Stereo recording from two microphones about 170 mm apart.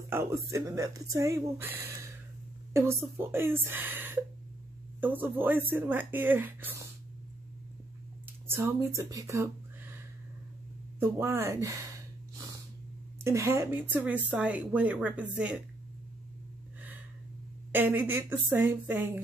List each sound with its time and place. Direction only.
0.1 s speech: 15° right (ahead or behind)
8.5 s speech: 15° right (ahead or behind)
11.0 s speech: 15° right (ahead or behind)
13.2 s speech: 15° right (ahead or behind)
17.7 s speech: 10° right (ahead or behind)